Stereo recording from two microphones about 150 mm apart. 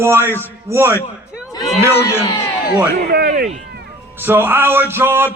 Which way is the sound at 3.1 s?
85° right.